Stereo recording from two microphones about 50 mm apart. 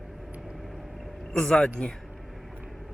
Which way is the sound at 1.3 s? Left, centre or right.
Centre.